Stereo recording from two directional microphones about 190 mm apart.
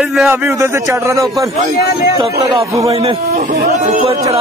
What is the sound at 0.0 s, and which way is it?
Speech, centre (ahead or behind).